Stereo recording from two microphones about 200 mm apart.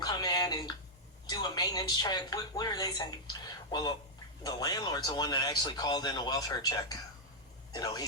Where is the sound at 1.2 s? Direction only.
20° left (ahead or behind).